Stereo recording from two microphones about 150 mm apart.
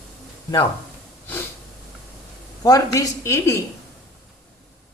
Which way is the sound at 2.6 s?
25° left (ahead or behind).